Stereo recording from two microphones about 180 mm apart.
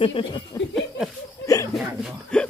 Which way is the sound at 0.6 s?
20° left (ahead or behind).